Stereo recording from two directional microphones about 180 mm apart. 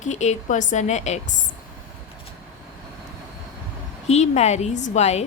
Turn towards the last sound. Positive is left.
turn(degrees=40)  # may be behind; listen again after turning